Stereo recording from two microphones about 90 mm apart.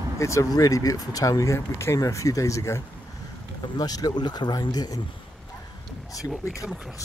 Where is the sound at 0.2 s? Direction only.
35° left (ahead or behind).